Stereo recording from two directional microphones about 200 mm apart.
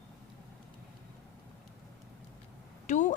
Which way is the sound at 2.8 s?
40° left (ahead or behind).